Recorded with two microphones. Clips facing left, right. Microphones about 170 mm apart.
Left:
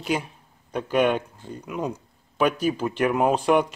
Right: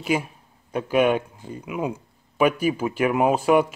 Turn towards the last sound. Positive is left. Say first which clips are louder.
# right 2 dB
turn(degrees=-5)  # may be behind; listen again after turning